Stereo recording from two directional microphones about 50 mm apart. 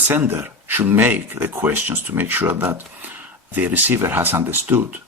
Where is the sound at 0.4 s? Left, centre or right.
Right.